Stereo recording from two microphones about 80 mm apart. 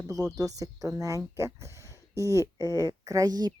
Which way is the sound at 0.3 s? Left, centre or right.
Right.